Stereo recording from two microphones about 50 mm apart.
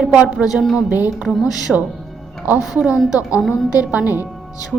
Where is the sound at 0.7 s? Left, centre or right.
Right.